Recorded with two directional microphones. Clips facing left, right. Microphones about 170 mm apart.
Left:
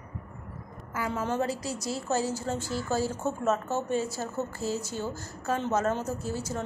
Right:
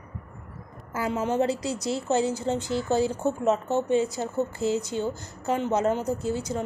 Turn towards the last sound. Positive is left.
turn(degrees=-20)  # may be behind; listen again after turning